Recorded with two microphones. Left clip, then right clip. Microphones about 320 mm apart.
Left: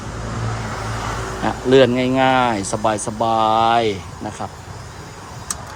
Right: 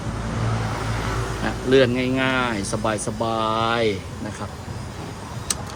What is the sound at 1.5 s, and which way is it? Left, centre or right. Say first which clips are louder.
Speech: left 5 dB; centre.